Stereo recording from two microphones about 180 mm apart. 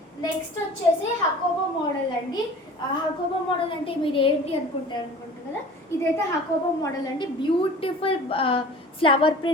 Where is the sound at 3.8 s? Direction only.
30° left (ahead or behind).